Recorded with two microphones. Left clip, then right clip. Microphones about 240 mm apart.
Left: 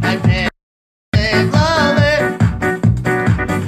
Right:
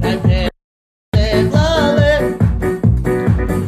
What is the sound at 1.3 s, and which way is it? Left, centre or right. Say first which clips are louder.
Music: even; left.